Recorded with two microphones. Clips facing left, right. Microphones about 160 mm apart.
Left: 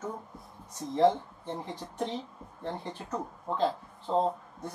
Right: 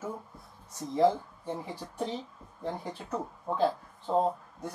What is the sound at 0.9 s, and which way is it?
Speech, 10° right (ahead or behind).